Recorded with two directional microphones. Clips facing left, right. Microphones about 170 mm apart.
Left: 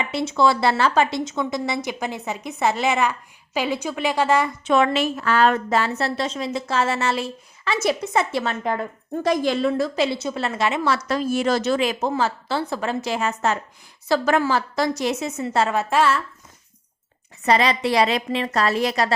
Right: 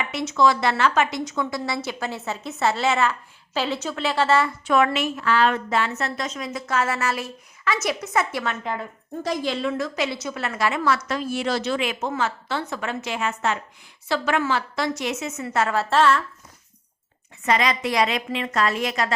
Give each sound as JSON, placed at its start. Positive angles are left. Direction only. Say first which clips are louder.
{"t": 0.0, "sound": "a woman's voice", "louder": "left 1 dB", "side_deg": 30}
{"t": 9.2, "sound": "a woman's voice", "louder": "left 5 dB", "side_deg": 50}
{"t": 10.9, "sound": "a woman's voice", "louder": "left 4 dB", "side_deg": 35}
{"t": 17.4, "sound": "a woman's voice", "louder": "left 3 dB", "side_deg": 35}